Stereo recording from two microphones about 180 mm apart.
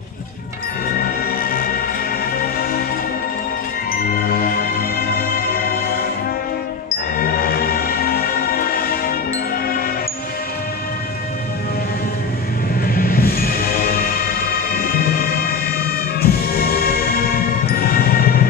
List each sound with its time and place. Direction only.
1.4 s music: 55° left (ahead or behind)
4.0 s music: 55° left (ahead or behind)
7.2 s music: 55° left (ahead or behind)
12.8 s music: 55° left (ahead or behind)